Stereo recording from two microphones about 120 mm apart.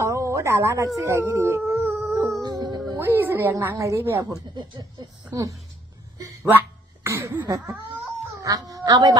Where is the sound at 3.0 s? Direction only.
20° right (ahead or behind).